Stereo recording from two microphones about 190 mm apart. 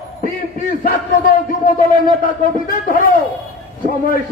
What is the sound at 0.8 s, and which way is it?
Speech, 50° left (ahead or behind).